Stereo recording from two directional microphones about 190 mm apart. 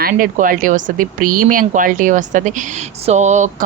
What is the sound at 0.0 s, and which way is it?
Speech, 45° right (ahead or behind).